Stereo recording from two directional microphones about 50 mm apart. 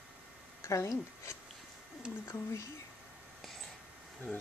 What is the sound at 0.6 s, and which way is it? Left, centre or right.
Speech, left.